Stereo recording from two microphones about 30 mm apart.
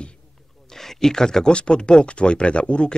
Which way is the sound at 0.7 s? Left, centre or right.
Centre.